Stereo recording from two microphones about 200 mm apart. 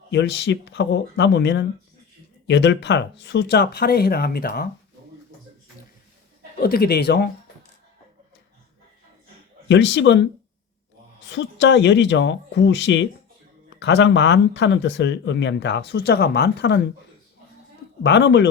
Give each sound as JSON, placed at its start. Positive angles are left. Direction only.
{"t": 0.1, "sound": "speech", "side_deg": 60}
{"t": 6.6, "sound": "speech", "side_deg": 50}
{"t": 9.6, "sound": "speech", "side_deg": 65}
{"t": 11.3, "sound": "speech", "side_deg": 65}
{"t": 18.0, "sound": "speech", "side_deg": 60}